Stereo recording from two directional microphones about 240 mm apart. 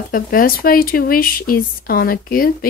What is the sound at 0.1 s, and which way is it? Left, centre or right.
Speech, left.